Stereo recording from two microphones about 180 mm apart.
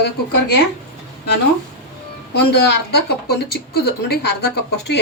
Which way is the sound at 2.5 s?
70° left (ahead or behind).